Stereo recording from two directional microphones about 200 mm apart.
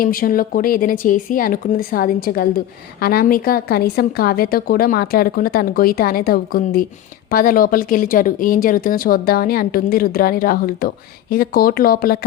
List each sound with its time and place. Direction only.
0.0 s speech: 45° left (ahead or behind)